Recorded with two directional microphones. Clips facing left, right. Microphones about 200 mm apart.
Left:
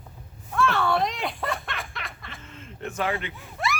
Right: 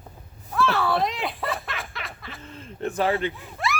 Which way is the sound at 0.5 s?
Centre (ahead or behind).